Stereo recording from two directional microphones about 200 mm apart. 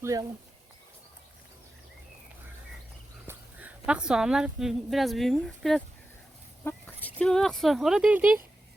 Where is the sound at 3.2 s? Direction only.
5° right (ahead or behind).